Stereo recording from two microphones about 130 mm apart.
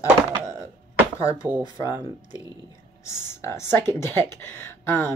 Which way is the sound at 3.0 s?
20° left (ahead or behind).